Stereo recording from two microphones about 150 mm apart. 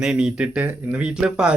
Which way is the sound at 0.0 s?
5° right (ahead or behind).